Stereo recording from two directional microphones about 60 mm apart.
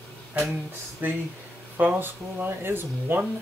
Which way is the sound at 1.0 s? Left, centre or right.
Right.